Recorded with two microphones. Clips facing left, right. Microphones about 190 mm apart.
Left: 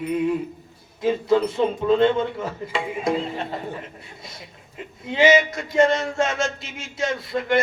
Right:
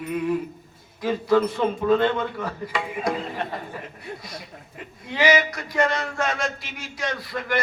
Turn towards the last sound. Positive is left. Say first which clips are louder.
# left 5 dB
turn(degrees=25)  # may be behind; listen again after turning